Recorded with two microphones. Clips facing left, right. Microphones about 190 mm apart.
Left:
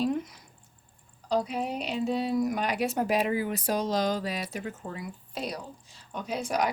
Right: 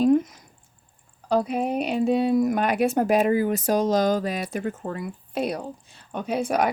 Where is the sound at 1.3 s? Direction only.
55° right (ahead or behind).